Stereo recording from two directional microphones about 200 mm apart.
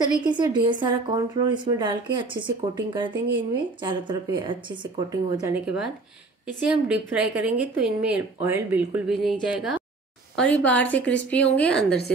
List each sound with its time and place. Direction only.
0.0 s speech: 20° right (ahead or behind)
6.7 s a woman's voice: 5° right (ahead or behind)